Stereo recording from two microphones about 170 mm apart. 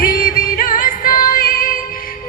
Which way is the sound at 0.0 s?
55° left (ahead or behind).